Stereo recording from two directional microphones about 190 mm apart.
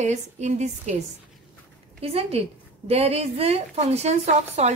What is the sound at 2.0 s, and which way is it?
A woman's voice, 30° right (ahead or behind).